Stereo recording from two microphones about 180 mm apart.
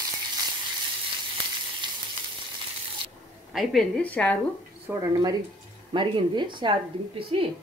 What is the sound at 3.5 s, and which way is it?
Speech, centre (ahead or behind).